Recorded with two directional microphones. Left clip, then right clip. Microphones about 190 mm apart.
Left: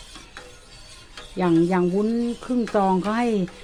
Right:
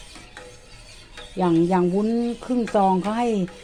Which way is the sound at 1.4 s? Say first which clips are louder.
Even; 10° left (ahead or behind).